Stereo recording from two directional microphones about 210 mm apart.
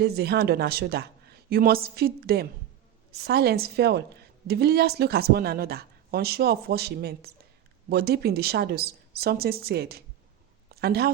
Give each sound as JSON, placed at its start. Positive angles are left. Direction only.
{"t": 0.0, "sound": "a woman's voice", "side_deg": -50}